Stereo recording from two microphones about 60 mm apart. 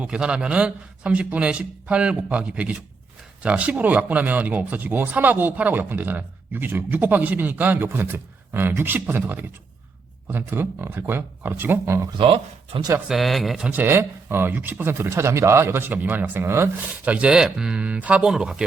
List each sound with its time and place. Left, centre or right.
0.0 s a man's voice: centre; by 11.8 s right
13.1 s a man's voice: centre
13.7 s speech: right
15.9 s a man's voice: right
18.3 s speech: centre